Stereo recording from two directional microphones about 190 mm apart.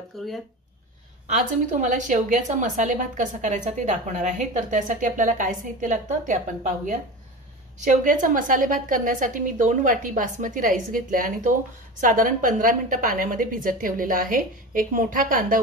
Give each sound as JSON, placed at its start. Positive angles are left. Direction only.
{"t": 0.1, "sound": "speech", "side_deg": 0}
{"t": 1.7, "sound": "a woman's voice", "side_deg": -40}